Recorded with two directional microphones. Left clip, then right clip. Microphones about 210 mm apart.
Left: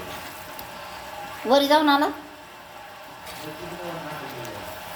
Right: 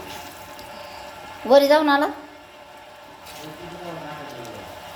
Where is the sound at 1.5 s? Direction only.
5° right (ahead or behind).